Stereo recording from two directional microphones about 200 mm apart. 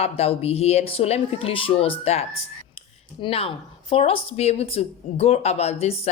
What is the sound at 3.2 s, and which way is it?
Speech, 30° left (ahead or behind).